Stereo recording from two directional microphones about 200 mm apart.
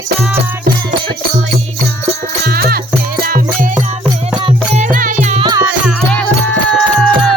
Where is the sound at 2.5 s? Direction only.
50° right (ahead or behind).